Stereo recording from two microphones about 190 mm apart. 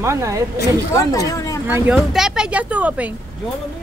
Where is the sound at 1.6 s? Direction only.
10° right (ahead or behind).